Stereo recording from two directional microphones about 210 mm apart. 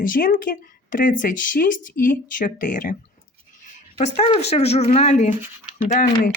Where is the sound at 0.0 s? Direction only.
40° left (ahead or behind).